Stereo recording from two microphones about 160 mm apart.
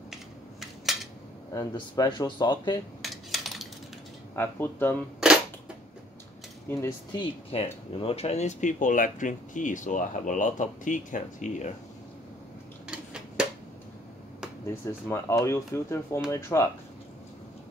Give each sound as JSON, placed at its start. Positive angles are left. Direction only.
{"t": 0.1, "sound": "a sound", "side_deg": 0}
{"t": 1.5, "sound": "speech", "side_deg": 20}
{"t": 3.0, "sound": "cutlery", "side_deg": 0}
{"t": 4.4, "sound": "speech", "side_deg": 15}
{"t": 5.2, "sound": "cap gun", "side_deg": -5}
{"t": 6.7, "sound": "speech", "side_deg": 15}
{"t": 7.2, "sound": "speech", "side_deg": 35}
{"t": 12.8, "sound": "tick-tock", "side_deg": -5}
{"t": 14.7, "sound": "speech", "side_deg": 15}